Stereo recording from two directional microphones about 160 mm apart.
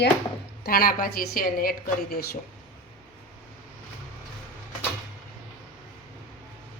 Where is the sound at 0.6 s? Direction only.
65° left (ahead or behind).